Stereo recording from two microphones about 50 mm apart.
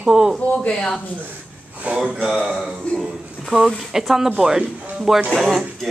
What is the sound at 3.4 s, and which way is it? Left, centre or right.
Speech, centre.